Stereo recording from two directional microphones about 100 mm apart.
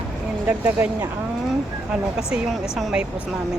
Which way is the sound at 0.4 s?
20° right (ahead or behind).